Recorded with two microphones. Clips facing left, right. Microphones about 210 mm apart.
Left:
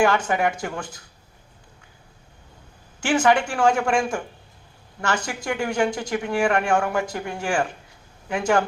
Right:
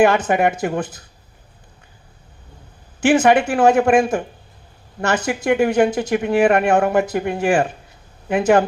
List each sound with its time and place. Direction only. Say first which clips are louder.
0.0 s speech: right 5 dB; 20° right (ahead or behind)
3.1 s speech: right 5 dB; 20° right (ahead or behind)